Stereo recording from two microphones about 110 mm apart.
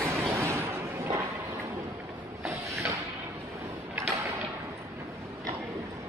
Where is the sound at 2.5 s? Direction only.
30° right (ahead or behind).